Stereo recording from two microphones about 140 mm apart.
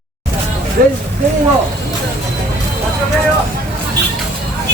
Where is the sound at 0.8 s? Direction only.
80° right.